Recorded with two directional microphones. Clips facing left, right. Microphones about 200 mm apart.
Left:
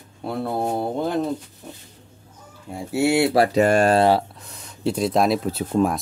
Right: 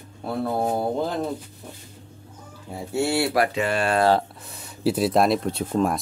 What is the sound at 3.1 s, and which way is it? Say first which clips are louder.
Speech: left 6 dB; 25° left (ahead or behind).